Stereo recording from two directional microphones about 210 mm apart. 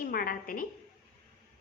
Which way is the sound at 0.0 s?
40° left (ahead or behind).